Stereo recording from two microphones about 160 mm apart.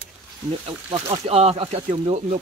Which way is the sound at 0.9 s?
40° right (ahead or behind).